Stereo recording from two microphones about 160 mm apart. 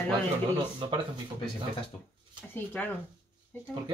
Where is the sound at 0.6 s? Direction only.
30° right (ahead or behind).